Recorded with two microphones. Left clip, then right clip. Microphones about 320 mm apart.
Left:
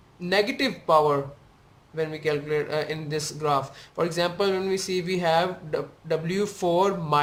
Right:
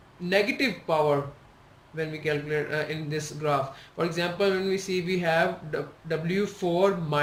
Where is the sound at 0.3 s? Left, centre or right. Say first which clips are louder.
Left 1 dB; centre.